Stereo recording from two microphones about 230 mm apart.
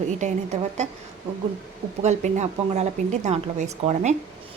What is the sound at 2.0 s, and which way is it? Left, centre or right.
Speech, right.